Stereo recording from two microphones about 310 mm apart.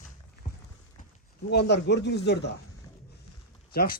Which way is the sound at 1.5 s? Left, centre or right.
Left.